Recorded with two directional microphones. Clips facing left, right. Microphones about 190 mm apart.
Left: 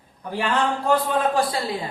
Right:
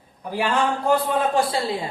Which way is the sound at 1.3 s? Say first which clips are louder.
Right 1 dB; 25° right (ahead or behind).